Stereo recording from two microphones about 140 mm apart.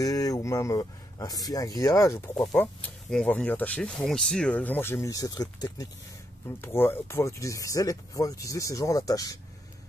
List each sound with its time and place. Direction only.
0.0 s speech: 25° left (ahead or behind)
2.8 s speech: 5° left (ahead or behind); by 5.9 s 30° left (ahead or behind)
6.6 s speech: 15° left (ahead or behind)